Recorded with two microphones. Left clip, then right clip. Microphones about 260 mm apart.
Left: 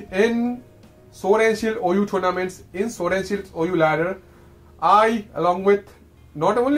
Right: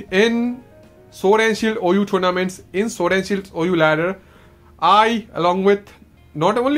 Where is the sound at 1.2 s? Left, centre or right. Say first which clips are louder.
Right 2 dB; right.